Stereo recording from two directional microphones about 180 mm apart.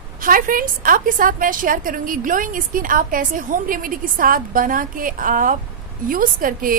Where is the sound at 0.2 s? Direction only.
50° right (ahead or behind).